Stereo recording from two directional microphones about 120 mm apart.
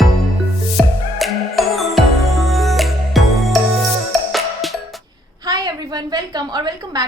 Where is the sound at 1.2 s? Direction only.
Centre (ahead or behind).